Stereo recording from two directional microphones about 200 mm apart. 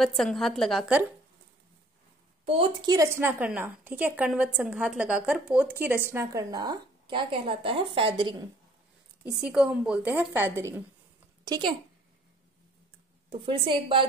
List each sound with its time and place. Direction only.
0.0 s a woman's voice: centre (ahead or behind)
2.4 s a woman's voice: 25° right (ahead or behind)
9.2 s a woman's voice: 5° right (ahead or behind); by 11.7 s 20° right (ahead or behind)
13.3 s a woman's voice: 25° right (ahead or behind)